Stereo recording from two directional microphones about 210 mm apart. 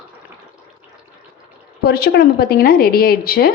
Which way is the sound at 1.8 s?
50° left (ahead or behind).